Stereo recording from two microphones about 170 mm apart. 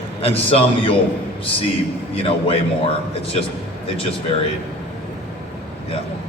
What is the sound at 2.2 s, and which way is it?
Speech, 35° left (ahead or behind).